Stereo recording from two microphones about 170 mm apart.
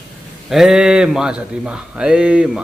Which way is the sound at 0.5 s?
5° right (ahead or behind).